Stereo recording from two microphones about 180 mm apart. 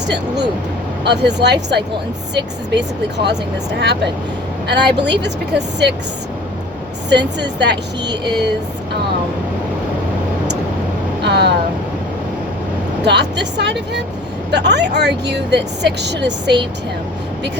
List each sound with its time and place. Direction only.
1.0 s speech: 70° right (ahead or behind)
7.1 s speech: 70° right (ahead or behind)
11.2 s vehicle: 70° right (ahead or behind)
13.1 s speech: 70° right (ahead or behind)